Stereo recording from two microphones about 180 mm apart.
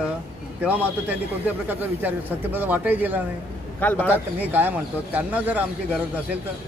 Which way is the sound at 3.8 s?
10° left (ahead or behind).